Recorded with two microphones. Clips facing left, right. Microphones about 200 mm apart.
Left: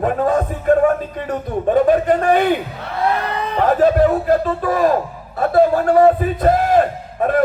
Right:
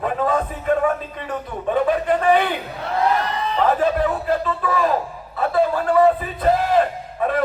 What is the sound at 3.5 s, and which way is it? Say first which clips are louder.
A man's voice: left 5 dB; 50° left (ahead or behind).